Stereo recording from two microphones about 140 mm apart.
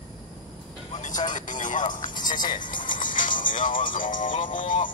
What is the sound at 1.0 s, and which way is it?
Music, 65° left (ahead or behind).